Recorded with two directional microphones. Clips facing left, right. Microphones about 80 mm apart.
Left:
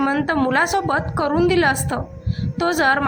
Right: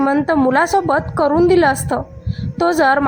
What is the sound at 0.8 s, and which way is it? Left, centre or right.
A woman's voice, right.